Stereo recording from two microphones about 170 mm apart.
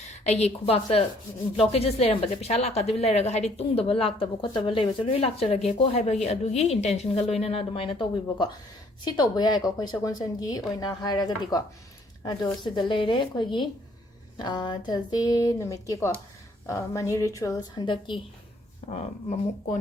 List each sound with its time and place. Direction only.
0.1 s a woman's voice: 40° left (ahead or behind)
18.8 s a woman's voice: 40° left (ahead or behind)